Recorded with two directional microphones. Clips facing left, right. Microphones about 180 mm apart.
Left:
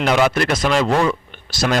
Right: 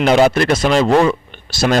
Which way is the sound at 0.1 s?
35° right (ahead or behind).